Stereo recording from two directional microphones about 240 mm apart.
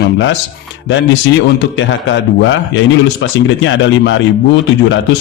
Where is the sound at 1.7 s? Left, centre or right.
Left.